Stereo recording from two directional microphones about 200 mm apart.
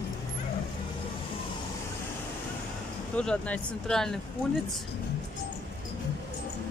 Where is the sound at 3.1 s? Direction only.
5° left (ahead or behind).